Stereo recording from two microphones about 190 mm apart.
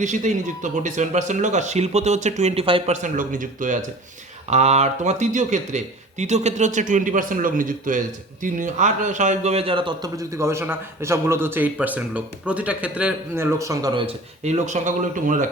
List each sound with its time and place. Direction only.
0.0 s speech: 40° right (ahead or behind); by 14.0 s 20° right (ahead or behind)
14.4 s speech: 40° right (ahead or behind)